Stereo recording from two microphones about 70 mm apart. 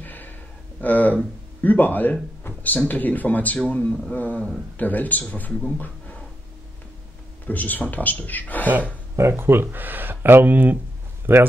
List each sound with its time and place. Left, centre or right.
0.0 s a sound: left
1.6 s speech: left
2.4 s a sound: left
2.9 s speech: left
7.4 s speech: left
9.3 s speech: right